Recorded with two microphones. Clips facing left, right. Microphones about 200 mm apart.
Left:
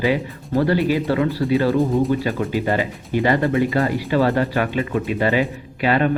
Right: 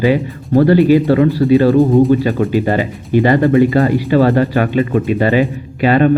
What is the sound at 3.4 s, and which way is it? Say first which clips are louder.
Speech: right 8 dB; 50° right (ahead or behind).